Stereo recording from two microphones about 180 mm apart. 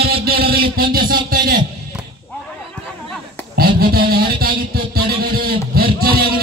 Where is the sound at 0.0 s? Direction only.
60° right (ahead or behind).